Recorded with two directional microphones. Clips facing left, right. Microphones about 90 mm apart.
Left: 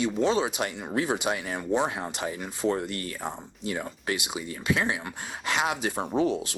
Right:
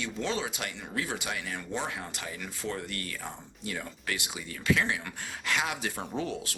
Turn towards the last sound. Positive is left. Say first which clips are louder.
# left 8 dB
turn(degrees=20)  # may be behind; listen again after turning